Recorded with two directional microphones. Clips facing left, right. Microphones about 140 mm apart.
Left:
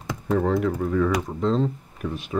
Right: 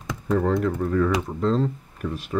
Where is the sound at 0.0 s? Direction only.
5° left (ahead or behind).